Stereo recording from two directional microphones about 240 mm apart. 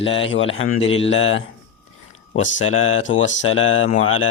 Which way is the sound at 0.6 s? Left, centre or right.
Left.